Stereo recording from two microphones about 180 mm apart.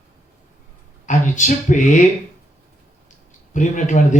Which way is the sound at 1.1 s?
45° left (ahead or behind).